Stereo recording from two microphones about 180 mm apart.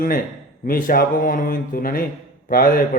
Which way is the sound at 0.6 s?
55° left (ahead or behind).